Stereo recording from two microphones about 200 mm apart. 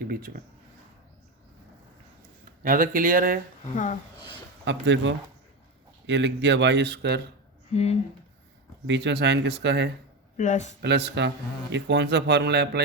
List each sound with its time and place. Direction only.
2.6 s speech: 45° right (ahead or behind)
4.6 s speech: 65° right (ahead or behind)
7.7 s speech: 30° left (ahead or behind)
8.9 s speech: 60° right (ahead or behind)
10.3 s speech: 35° left (ahead or behind)
10.8 s speech: 60° right (ahead or behind)